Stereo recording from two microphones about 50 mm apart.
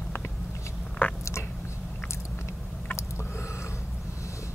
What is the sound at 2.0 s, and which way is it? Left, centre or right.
Biting, left.